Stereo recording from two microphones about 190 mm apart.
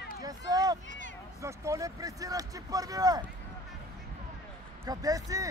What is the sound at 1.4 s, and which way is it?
Speech, 15° right (ahead or behind).